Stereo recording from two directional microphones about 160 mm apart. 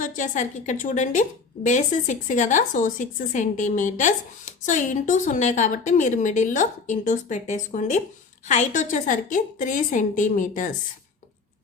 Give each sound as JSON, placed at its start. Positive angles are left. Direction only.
{"t": 0.0, "sound": "a woman's voice", "side_deg": 50}